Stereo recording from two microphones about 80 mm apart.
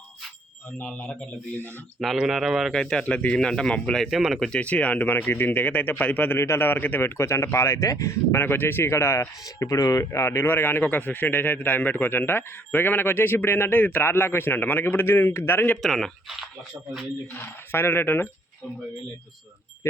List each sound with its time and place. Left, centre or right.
0.8 s speech: centre
2.1 s speech: centre
2.7 s speech: centre
4.4 s speech: centre
15.8 s speech: centre
17.3 s speech: left